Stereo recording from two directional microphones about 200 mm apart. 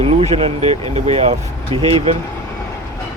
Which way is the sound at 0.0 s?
30° right (ahead or behind).